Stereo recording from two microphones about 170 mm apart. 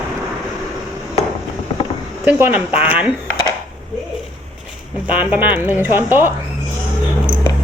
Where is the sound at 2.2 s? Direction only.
10° right (ahead or behind).